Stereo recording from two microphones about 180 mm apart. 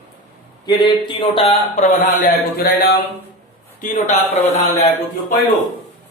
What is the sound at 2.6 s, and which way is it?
Speech, 55° left (ahead or behind).